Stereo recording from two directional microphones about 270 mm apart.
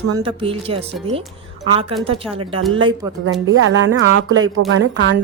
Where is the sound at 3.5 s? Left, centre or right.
Right.